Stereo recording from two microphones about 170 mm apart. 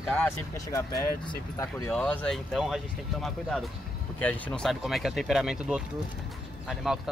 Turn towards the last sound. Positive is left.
turn(degrees=-5)  # may be behind; listen again after turning